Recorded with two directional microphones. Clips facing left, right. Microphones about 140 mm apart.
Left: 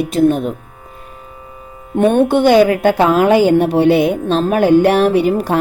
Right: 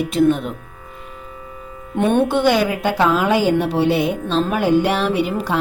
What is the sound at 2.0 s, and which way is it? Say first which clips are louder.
A woman's voice: left 5 dB; 55° left (ahead or behind).